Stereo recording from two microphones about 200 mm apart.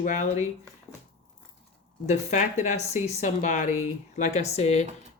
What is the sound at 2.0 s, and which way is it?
Speech, 35° left (ahead or behind).